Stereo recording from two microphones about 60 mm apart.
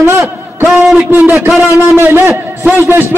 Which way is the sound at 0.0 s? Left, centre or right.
Right.